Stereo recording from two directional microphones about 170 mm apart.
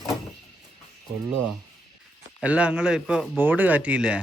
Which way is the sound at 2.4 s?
5° right (ahead or behind).